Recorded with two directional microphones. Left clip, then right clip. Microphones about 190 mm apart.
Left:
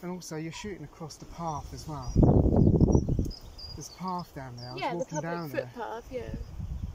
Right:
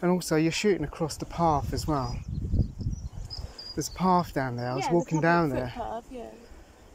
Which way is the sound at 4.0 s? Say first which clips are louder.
Right 11 dB; 55° right (ahead or behind).